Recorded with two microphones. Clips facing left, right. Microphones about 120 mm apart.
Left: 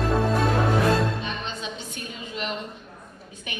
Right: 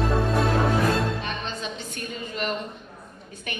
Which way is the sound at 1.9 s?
50° right (ahead or behind).